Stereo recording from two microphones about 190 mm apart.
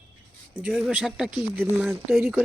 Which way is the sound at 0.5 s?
5° right (ahead or behind).